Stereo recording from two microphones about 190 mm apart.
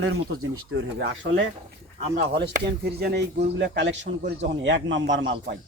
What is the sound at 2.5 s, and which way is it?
A man's voice, 55° right (ahead or behind).